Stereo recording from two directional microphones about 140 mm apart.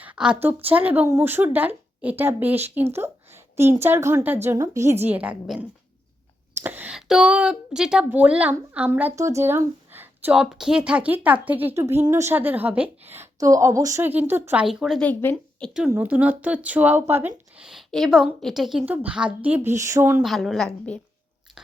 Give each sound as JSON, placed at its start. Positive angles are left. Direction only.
{"t": 0.0, "sound": "a sound", "side_deg": -10}
{"t": 0.4, "sound": "a woman's voice", "side_deg": -10}
{"t": 5.0, "sound": "a woman's voice", "side_deg": -10}
{"t": 15.0, "sound": "speech", "side_deg": 10}
{"t": 15.9, "sound": "a woman's voice", "side_deg": -10}
{"t": 20.2, "sound": "a woman's voice", "side_deg": 0}